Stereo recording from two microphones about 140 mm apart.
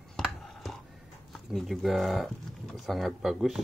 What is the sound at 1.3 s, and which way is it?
Speech, centre (ahead or behind).